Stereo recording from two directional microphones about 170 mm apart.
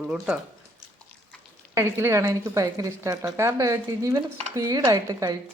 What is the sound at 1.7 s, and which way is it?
A woman's voice, 15° right (ahead or behind).